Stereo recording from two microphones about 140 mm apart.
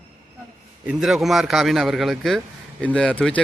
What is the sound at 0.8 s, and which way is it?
Speech, 5° right (ahead or behind).